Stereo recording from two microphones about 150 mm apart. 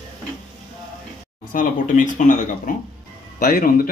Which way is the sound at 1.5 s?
65° left (ahead or behind).